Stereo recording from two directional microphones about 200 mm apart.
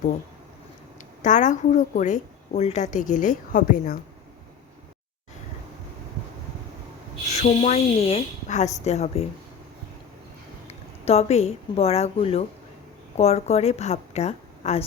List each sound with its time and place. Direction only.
1.2 s a woman's voice: 40° left (ahead or behind)
7.3 s a woman's voice: 35° left (ahead or behind)
10.7 s a woman's voice: 30° left (ahead or behind)